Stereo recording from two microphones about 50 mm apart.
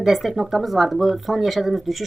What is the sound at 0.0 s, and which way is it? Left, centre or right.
Speech, centre.